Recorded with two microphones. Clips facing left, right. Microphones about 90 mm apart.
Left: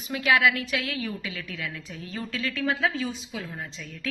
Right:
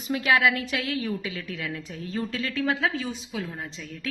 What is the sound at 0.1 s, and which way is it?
A woman's voice, 30° right (ahead or behind).